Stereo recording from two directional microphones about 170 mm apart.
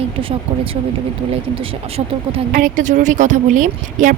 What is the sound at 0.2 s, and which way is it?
Speech, 30° right (ahead or behind).